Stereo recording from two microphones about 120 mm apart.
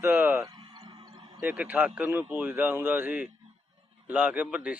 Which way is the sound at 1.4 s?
10° right (ahead or behind).